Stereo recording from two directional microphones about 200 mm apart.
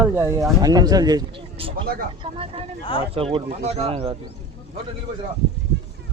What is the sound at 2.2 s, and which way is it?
Speech, 25° right (ahead or behind).